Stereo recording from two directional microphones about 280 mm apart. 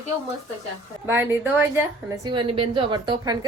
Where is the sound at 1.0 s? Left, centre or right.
Centre.